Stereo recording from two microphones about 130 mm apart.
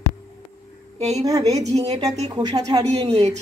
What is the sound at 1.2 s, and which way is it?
A woman's voice, 25° right (ahead or behind).